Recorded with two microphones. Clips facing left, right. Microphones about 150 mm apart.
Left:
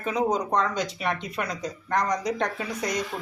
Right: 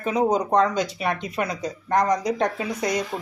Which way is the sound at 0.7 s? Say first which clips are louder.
Right 3 dB; 10° right (ahead or behind).